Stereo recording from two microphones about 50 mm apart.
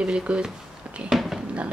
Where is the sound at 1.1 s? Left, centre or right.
Centre.